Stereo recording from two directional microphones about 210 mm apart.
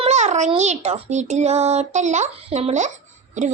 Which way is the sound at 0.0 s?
30° right (ahead or behind).